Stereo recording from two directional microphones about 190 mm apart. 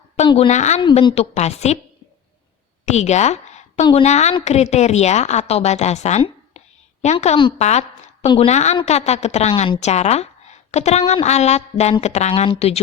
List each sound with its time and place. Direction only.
0.3 s a woman's voice: 30° left (ahead or behind)
2.8 s a woman's voice: 35° left (ahead or behind)